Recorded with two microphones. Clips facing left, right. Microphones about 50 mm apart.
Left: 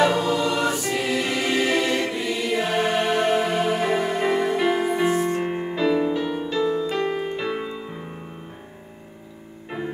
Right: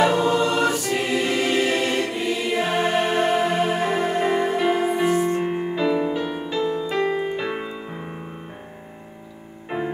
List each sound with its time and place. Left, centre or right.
0.0 s choir: centre
2.1 s music: centre
9.7 s music: centre